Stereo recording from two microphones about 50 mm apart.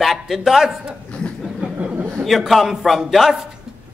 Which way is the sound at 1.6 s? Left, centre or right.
Centre.